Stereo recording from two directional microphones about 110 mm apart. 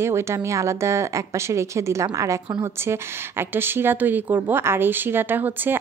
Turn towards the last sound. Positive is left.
turn(degrees=-15)  # may be behind; listen again after turning